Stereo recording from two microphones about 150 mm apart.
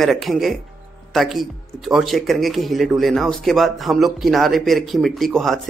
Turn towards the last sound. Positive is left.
turn(degrees=0)  # may be behind; listen again after turning